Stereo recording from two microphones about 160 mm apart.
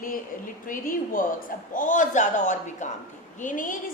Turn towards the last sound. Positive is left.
turn(degrees=55)  # may be behind; listen again after turning